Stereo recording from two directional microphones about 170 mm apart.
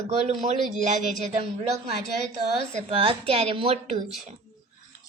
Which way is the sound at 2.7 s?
35° right (ahead or behind).